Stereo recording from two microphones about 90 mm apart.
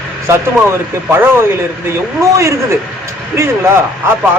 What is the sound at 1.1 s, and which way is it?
Speech, 25° right (ahead or behind).